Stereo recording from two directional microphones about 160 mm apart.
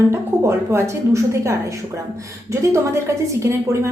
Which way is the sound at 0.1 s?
15° right (ahead or behind).